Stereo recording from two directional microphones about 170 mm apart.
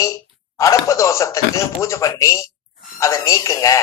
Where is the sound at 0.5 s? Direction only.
20° left (ahead or behind).